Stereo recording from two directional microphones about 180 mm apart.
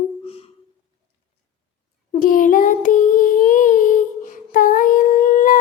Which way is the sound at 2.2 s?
50° left (ahead or behind).